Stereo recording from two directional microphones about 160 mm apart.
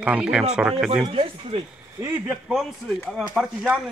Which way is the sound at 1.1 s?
35° right (ahead or behind).